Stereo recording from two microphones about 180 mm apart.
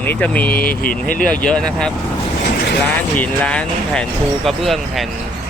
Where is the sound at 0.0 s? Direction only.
10° left (ahead or behind).